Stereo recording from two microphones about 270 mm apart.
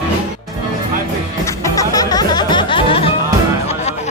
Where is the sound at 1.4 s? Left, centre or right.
Centre.